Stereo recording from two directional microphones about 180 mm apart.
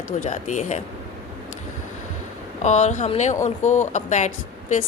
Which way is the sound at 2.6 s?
40° left (ahead or behind).